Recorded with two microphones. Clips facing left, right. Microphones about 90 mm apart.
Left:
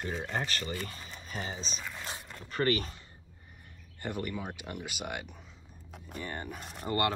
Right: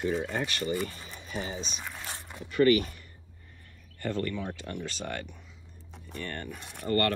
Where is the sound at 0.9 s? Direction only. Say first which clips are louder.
Right 1 dB; 40° left (ahead or behind).